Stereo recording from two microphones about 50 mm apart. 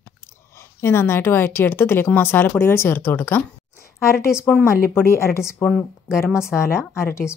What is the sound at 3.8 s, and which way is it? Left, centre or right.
A woman's voice, left.